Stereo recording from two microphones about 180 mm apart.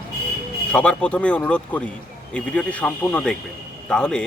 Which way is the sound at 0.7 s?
5° left (ahead or behind).